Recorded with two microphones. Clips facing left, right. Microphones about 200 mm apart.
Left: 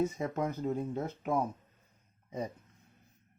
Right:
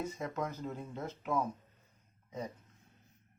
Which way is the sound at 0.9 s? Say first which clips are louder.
Left 5 dB; 50° left (ahead or behind).